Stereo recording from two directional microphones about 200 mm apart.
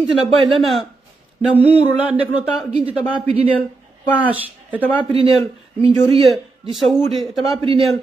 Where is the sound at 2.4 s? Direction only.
5° right (ahead or behind).